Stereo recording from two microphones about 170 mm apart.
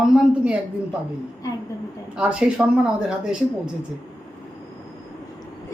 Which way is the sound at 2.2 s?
5° right (ahead or behind).